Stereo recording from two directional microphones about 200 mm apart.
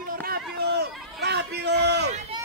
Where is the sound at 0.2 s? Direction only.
50° right (ahead or behind).